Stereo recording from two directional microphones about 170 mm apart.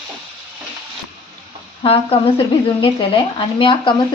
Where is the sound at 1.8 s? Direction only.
35° left (ahead or behind).